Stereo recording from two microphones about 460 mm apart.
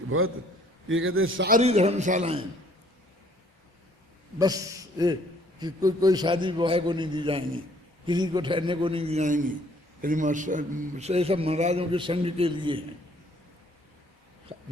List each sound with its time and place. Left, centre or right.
0.1 s a man's voice: right
4.4 s a man's voice: centre
14.5 s a sound: centre